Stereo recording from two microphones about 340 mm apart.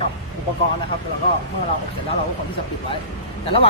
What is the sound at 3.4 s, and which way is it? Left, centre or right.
Speech, centre.